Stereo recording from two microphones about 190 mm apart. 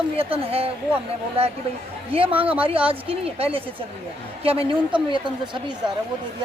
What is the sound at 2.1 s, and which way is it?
A woman's voice, 30° right (ahead or behind).